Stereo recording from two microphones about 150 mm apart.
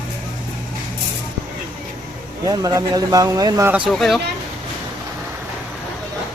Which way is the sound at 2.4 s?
25° right (ahead or behind).